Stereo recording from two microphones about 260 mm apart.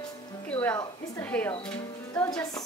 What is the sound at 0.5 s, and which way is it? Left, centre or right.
Speech, centre.